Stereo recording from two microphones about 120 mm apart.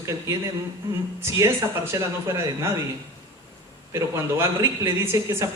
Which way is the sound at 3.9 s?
20° right (ahead or behind).